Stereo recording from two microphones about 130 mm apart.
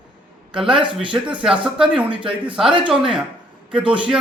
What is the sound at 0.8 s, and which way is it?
Speech, 40° right (ahead or behind).